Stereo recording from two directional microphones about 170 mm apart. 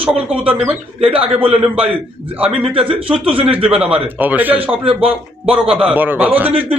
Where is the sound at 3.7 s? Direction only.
5° right (ahead or behind).